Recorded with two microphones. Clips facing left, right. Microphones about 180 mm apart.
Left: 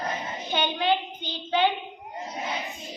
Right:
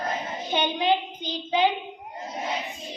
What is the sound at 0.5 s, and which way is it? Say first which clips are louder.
A woman's voice: right 1 dB; 15° right (ahead or behind).